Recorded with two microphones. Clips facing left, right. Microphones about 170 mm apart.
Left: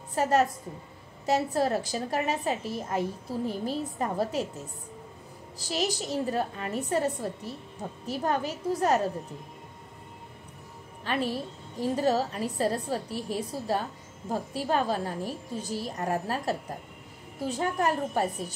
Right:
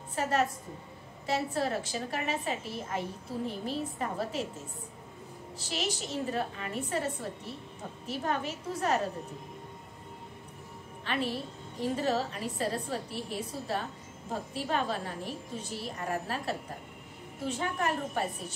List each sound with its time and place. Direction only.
0.1 s a woman's voice: 40° left (ahead or behind)
5.6 s a woman's voice: 40° left (ahead or behind)
11.1 s a woman's voice: 40° left (ahead or behind)